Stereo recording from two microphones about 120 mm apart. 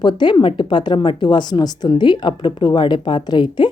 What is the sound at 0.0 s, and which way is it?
Speech, 40° left (ahead or behind).